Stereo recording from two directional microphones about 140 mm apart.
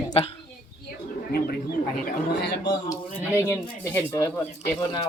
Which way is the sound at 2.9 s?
20° left (ahead or behind).